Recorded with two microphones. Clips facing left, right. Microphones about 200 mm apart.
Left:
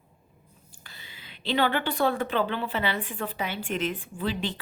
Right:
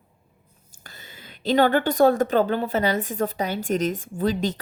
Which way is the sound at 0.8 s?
45° right (ahead or behind).